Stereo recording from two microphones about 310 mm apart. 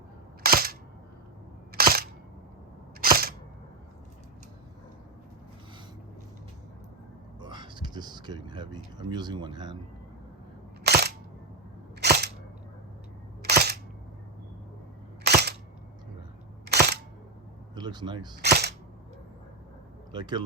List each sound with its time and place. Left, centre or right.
0.4 s cap gun: right
1.7 s single-lens reflex camera: right
7.3 s speech: centre
10.8 s single-lens reflex camera: right
11.9 s cap gun: right
13.4 s single-lens reflex camera: right
15.2 s cap gun: right
16.6 s single-lens reflex camera: right
17.7 s speech: centre
18.4 s cap gun: right
20.1 s speech: centre